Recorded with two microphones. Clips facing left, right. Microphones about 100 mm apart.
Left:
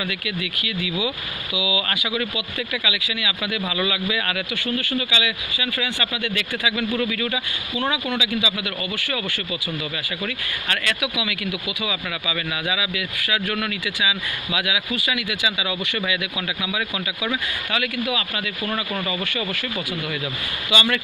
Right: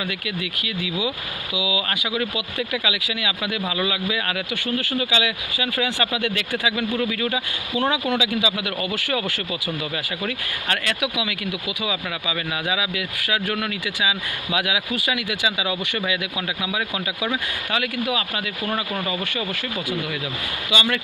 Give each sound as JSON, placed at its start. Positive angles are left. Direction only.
{"t": 1.0, "sound": "speech", "side_deg": -35}
{"t": 2.3, "sound": "speech", "side_deg": -45}
{"t": 3.7, "sound": "speech", "side_deg": -30}
{"t": 6.9, "sound": "speech", "side_deg": -30}
{"t": 8.4, "sound": "speech", "side_deg": -50}
{"t": 10.2, "sound": "speech", "side_deg": -35}
{"t": 20.7, "sound": "speech", "side_deg": -15}